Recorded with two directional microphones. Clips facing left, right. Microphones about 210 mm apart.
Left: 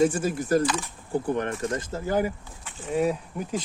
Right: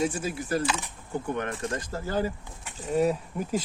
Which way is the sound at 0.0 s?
50° left (ahead or behind).